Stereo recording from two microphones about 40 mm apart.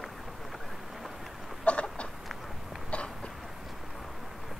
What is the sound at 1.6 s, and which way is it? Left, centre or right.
Chicken, left.